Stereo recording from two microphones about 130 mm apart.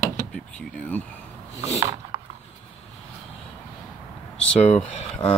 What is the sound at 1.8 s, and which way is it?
Mechanisms, 30° right (ahead or behind).